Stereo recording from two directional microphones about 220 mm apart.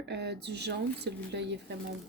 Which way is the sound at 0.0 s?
50° right (ahead or behind).